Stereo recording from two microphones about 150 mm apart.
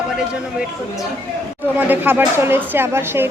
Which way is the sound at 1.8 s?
10° right (ahead or behind).